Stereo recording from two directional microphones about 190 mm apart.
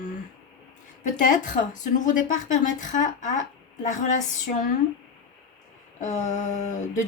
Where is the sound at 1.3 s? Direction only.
40° left (ahead or behind).